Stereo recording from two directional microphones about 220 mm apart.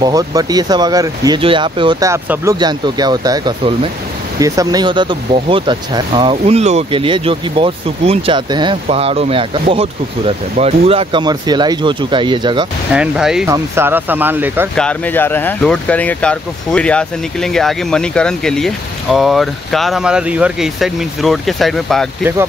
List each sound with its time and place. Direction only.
0.0 s speech: 15° right (ahead or behind)
12.9 s speech: 5° right (ahead or behind)
14.8 s speech: 5° left (ahead or behind)